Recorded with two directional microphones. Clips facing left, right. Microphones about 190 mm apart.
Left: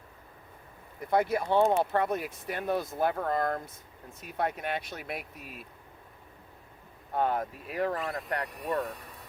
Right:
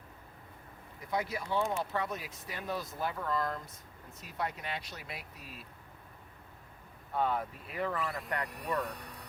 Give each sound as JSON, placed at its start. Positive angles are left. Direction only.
{"t": 1.1, "sound": "speech", "side_deg": 55}
{"t": 7.1, "sound": "speech", "side_deg": 45}
{"t": 8.0, "sound": "speech", "side_deg": 0}